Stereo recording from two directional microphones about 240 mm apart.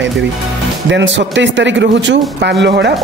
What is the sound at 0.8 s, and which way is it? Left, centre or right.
Speech, right.